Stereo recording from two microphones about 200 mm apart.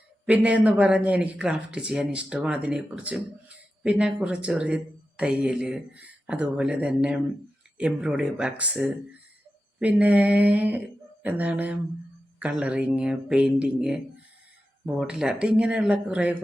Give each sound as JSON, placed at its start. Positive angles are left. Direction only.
{"t": 0.3, "sound": "speech", "side_deg": -5}